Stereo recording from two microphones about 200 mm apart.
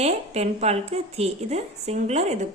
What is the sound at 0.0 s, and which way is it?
Speech, 30° right (ahead or behind).